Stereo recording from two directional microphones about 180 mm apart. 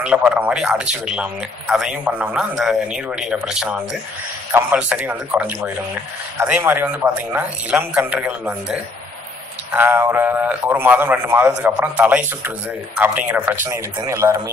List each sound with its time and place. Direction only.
0.0 s a man's voice: 5° right (ahead or behind)